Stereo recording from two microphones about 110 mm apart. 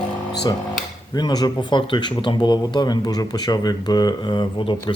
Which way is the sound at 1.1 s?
40° left (ahead or behind).